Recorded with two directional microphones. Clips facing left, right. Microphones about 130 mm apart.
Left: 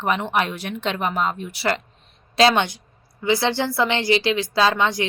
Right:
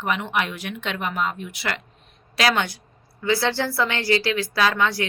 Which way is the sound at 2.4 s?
25° left (ahead or behind).